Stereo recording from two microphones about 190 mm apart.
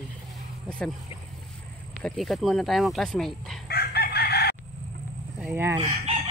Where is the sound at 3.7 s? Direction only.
55° left (ahead or behind).